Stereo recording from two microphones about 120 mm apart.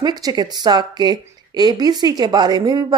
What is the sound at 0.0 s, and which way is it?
Speech, 30° right (ahead or behind).